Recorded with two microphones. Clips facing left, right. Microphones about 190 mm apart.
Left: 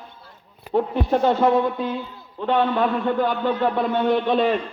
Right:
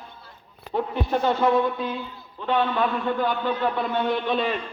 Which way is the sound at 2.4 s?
50° left (ahead or behind).